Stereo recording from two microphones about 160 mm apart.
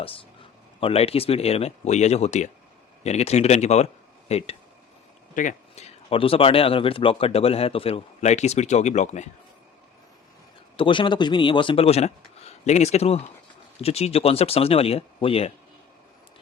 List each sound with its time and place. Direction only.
0.0 s speech: 35° left (ahead or behind)
5.3 s speech: 55° left (ahead or behind)
10.8 s speech: 30° left (ahead or behind)